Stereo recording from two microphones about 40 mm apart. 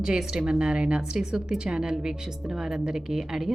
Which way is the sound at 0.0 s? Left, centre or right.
Centre.